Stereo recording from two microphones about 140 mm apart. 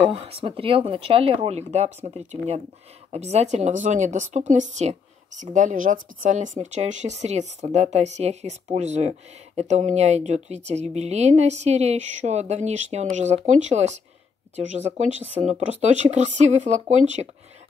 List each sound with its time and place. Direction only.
0.1 s speech: 40° right (ahead or behind)